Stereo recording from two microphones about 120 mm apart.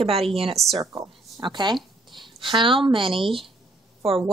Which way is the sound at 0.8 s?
25° right (ahead or behind).